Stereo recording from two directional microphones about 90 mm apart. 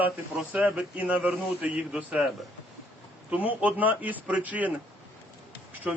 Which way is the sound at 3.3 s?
15° right (ahead or behind).